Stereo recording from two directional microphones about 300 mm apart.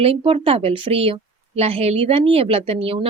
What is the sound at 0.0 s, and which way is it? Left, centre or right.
A woman's voice, centre.